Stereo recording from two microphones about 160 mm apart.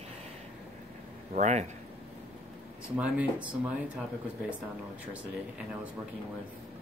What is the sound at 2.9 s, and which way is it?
Speech, 5° right (ahead or behind).